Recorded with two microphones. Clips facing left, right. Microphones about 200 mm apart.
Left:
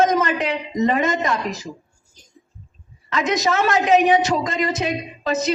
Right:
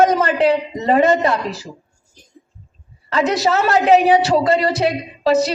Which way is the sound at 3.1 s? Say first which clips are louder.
Right 3 dB; 35° right (ahead or behind).